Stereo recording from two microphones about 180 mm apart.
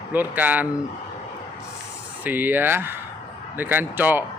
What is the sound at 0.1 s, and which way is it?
Speech, 10° right (ahead or behind).